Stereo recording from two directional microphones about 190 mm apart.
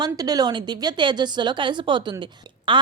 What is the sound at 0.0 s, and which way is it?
A woman's voice, 20° right (ahead or behind).